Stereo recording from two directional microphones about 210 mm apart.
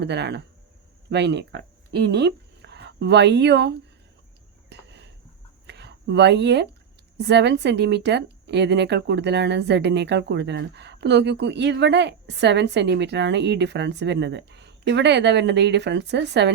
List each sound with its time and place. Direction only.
0.0 s a woman's voice: 55° right (ahead or behind)
4.7 s cricket: 55° right (ahead or behind)
5.6 s a sound: 55° right (ahead or behind)
7.2 s a woman's voice: 55° right (ahead or behind)